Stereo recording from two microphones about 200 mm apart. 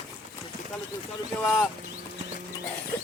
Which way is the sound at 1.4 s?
5° left (ahead or behind).